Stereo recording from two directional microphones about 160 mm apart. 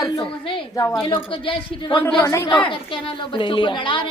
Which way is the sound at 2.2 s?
20° left (ahead or behind).